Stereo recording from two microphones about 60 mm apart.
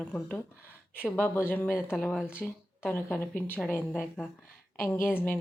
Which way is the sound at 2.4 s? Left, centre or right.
Left.